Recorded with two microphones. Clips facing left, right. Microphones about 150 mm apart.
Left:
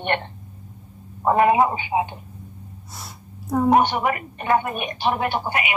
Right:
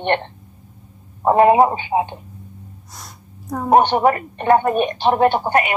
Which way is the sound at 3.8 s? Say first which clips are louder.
Right 5 dB; 40° right (ahead or behind).